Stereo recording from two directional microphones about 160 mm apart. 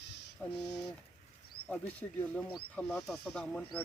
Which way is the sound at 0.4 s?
5° left (ahead or behind).